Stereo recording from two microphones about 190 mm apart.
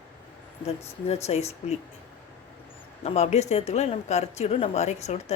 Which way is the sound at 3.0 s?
35° left (ahead or behind).